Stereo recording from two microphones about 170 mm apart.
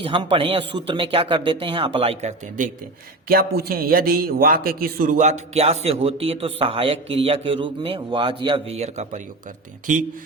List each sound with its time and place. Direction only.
0.0 s a man's voice: 30° right (ahead or behind)
3.2 s a man's voice: 65° right (ahead or behind); by 9.2 s 40° right (ahead or behind)